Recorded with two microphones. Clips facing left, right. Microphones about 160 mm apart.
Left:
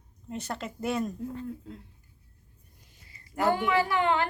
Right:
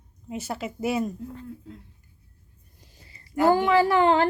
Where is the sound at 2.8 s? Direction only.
35° right (ahead or behind).